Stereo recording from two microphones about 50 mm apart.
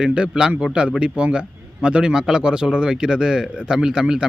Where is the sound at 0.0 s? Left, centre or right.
Centre.